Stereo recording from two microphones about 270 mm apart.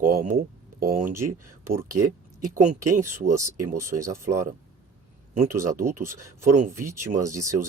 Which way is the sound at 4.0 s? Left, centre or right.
Centre.